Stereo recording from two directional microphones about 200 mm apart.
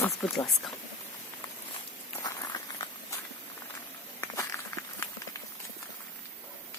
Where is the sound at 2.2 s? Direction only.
20° left (ahead or behind).